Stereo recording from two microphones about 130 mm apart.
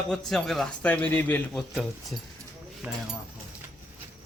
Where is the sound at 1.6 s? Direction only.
Centre (ahead or behind).